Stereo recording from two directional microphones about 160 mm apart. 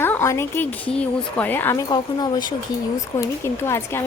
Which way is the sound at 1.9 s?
25° left (ahead or behind).